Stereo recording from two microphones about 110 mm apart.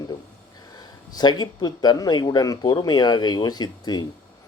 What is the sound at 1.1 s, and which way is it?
Speech, 40° left (ahead or behind).